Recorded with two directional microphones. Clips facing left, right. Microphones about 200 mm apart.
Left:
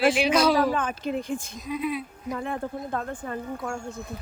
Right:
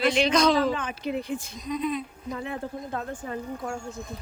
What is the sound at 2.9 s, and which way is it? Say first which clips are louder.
Speech: left 2 dB; 50° left (ahead or behind).